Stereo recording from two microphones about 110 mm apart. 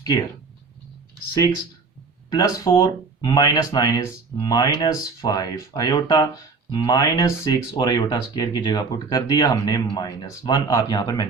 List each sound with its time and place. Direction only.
0.0 s speech: 30° left (ahead or behind)
2.3 s speech: 35° left (ahead or behind)